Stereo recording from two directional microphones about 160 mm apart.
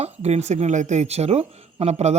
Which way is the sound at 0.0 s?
40° right (ahead or behind).